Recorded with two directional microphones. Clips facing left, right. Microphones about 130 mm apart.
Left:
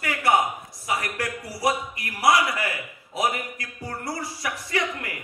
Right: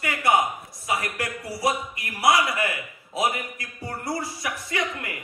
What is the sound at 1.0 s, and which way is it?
A man's voice, 20° right (ahead or behind).